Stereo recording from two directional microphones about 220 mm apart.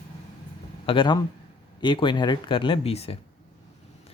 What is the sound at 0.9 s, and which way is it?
Speech, 20° left (ahead or behind).